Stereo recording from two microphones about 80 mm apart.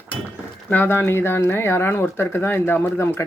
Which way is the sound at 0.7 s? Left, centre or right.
Left.